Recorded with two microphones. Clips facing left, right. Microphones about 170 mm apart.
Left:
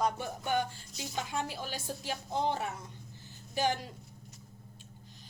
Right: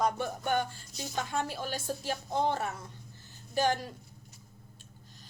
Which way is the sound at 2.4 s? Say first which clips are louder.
Right 2 dB; 15° left (ahead or behind).